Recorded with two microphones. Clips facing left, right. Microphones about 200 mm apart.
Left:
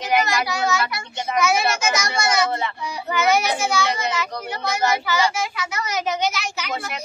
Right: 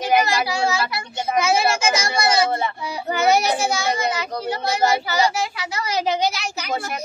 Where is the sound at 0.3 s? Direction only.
30° right (ahead or behind).